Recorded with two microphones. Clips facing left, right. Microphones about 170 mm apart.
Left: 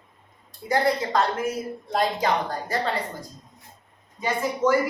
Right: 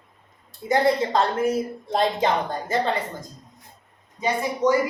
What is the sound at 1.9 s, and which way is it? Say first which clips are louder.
Speech: right 2 dB; 25° right (ahead or behind).